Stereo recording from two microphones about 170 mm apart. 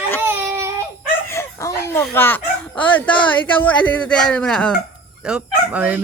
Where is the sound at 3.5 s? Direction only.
10° left (ahead or behind).